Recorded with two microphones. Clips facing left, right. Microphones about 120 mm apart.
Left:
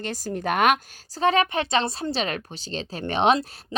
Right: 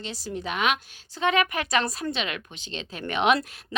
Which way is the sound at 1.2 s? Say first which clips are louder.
Left 3 dB; 35° left (ahead or behind).